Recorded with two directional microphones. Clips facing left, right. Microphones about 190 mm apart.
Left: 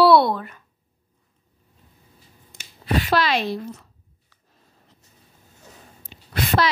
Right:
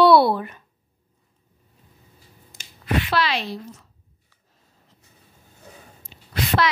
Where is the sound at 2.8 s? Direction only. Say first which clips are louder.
Left 2 dB; 40° left (ahead or behind); by 3.8 s 60° left (ahead or behind).